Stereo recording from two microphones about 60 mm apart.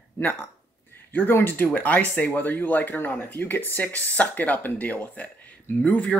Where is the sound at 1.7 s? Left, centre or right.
Left.